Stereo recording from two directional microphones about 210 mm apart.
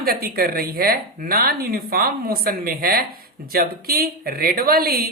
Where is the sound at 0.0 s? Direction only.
45° right (ahead or behind).